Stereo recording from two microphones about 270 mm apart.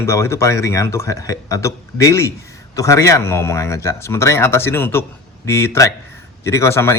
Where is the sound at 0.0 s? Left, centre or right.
Centre.